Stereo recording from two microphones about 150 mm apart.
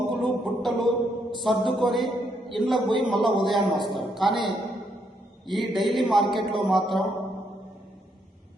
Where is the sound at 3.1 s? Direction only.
Centre (ahead or behind).